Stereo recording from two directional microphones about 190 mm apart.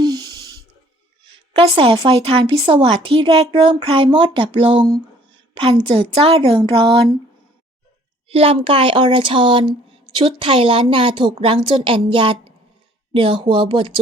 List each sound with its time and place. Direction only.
0.0 s a sound: 20° right (ahead or behind)
1.2 s a woman's voice: 25° right (ahead or behind)
8.3 s a woman's voice: 30° right (ahead or behind)